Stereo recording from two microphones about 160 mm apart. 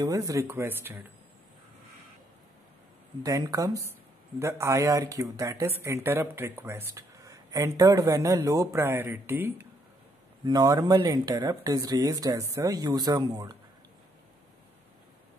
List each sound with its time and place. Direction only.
0.0 s speech: 20° right (ahead or behind)
3.2 s speech: 25° right (ahead or behind)
10.4 s speech: 25° right (ahead or behind)